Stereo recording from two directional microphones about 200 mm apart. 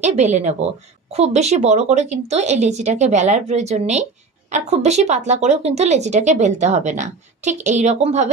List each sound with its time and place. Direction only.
0.0 s speech: 35° right (ahead or behind)